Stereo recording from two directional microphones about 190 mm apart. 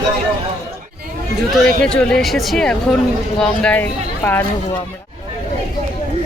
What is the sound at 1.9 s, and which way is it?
Speech, 5° left (ahead or behind).